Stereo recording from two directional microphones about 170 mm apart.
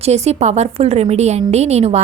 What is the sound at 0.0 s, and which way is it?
A woman's voice, 40° right (ahead or behind).